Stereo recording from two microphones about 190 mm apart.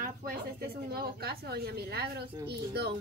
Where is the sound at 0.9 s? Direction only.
55° right (ahead or behind).